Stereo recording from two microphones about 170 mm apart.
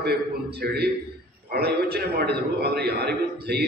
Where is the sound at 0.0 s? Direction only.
70° right (ahead or behind).